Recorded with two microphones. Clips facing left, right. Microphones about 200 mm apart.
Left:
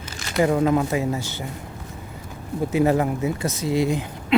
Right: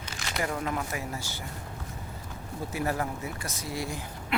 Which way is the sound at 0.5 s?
90° left.